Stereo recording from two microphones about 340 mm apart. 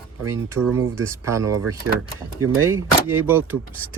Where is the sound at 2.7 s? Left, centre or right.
Right.